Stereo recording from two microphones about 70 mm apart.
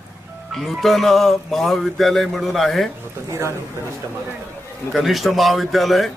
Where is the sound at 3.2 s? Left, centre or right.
Right.